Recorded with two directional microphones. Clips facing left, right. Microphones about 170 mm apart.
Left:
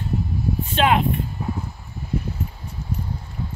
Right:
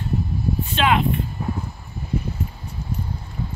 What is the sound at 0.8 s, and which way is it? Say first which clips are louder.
Speech: left 2 dB; 45° left (ahead or behind).